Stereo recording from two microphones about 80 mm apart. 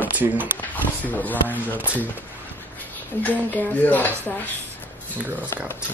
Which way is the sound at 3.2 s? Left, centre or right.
Left.